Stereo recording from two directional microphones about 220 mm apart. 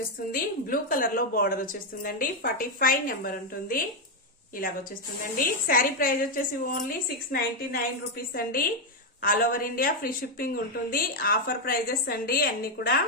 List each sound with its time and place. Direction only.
0.3 s a woman's voice: 40° left (ahead or behind)
5.4 s a woman's voice: 40° left (ahead or behind)